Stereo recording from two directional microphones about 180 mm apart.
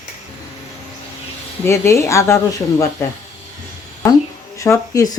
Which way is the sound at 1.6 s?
15° left (ahead or behind).